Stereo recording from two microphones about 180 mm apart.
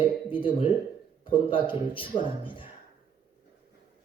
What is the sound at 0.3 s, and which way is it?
Speech, 30° left (ahead or behind).